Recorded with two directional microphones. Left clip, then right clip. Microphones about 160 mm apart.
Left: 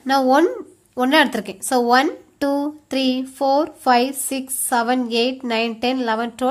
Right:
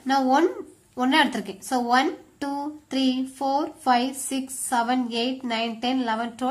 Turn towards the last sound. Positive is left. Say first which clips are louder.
# left 5 dB
turn(degrees=35)  # may be behind; listen again after turning